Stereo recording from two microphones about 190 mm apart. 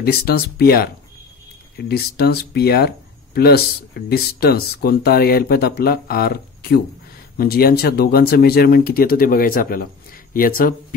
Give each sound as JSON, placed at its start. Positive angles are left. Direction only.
{"t": 0.0, "sound": "speech", "side_deg": 55}